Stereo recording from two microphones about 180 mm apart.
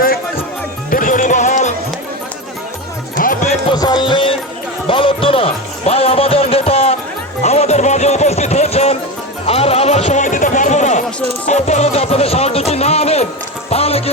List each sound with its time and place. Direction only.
0.9 s music: 50° left (ahead or behind)
3.2 s music: 50° left (ahead or behind)
3.7 s music: 25° left (ahead or behind)